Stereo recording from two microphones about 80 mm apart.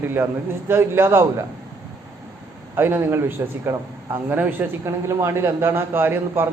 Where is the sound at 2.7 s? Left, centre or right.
Right.